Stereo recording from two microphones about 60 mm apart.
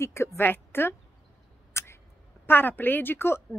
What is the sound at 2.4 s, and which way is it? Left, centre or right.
A woman's voice, left.